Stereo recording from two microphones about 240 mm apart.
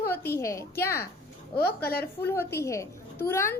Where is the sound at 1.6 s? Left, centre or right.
Left.